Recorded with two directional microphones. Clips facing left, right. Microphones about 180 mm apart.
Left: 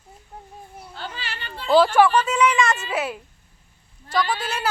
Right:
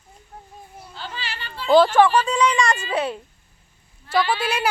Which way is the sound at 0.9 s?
50° left (ahead or behind).